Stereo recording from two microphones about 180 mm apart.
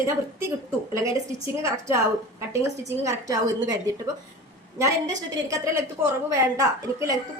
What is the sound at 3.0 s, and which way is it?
Speech, 20° right (ahead or behind).